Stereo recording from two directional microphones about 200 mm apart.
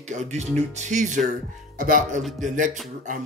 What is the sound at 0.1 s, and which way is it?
Speech, 35° right (ahead or behind).